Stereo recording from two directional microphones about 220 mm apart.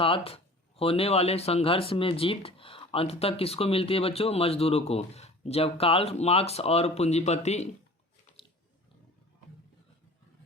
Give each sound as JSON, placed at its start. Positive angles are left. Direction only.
{"t": 0.0, "sound": "speech", "side_deg": 25}